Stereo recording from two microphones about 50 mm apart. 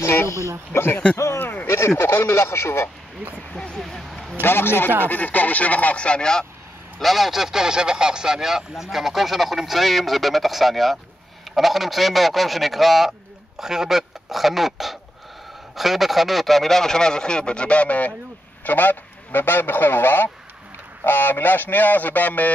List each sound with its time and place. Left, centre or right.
0.0 s speech: left
0.7 s a man's voice: left
1.1 s a sound: left
1.4 s a sound: left
2.0 s speech: left
3.7 s a sound: centre
4.4 s a man's voice: left
5.0 s speech: left; by 6.4 s centre
7.0 s speech: centre; by 22.5 s left